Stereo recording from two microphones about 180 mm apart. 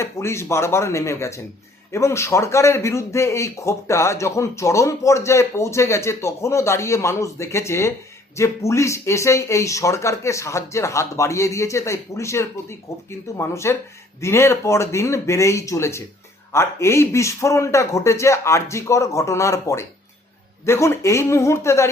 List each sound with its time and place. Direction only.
0.0 s a man's voice: 15° left (ahead or behind)